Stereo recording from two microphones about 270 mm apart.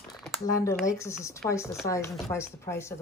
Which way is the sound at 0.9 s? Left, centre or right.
Centre.